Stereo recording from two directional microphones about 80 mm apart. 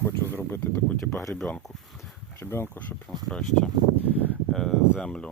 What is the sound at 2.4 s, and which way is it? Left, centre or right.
Speech, left.